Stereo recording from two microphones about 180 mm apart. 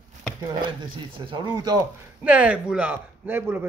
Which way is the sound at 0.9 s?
25° right (ahead or behind).